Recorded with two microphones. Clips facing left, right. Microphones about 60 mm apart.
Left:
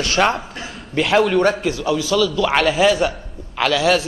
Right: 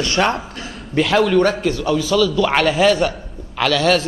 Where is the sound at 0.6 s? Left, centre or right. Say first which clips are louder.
Right 3 dB; centre.